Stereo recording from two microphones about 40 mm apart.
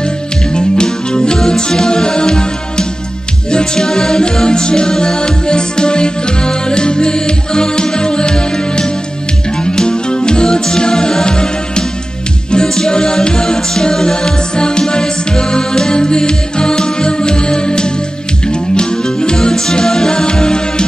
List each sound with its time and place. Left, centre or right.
0.5 s music: left